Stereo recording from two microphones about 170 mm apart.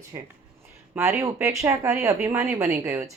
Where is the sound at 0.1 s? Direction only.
20° right (ahead or behind).